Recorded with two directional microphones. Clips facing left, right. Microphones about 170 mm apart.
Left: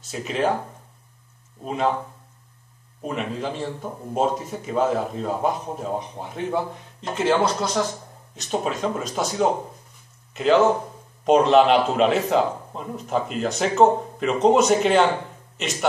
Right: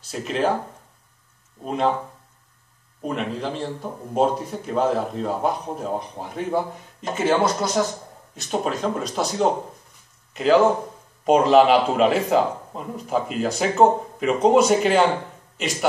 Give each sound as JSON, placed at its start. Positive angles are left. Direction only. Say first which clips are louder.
{"t": 0.1, "sound": "speech", "louder": "right 1 dB", "side_deg": 0}
{"t": 1.6, "sound": "speech", "louder": "right 1 dB", "side_deg": 0}
{"t": 3.0, "sound": "speech", "louder": "right 1 dB", "side_deg": 0}
{"t": 8.4, "sound": "speech", "louder": "even", "side_deg": 0}